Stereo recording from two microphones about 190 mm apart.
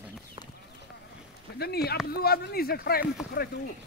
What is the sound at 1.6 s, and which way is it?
Speech, 55° left (ahead or behind).